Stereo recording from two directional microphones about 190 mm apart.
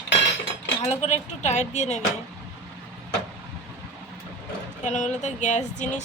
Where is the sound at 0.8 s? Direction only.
35° left (ahead or behind).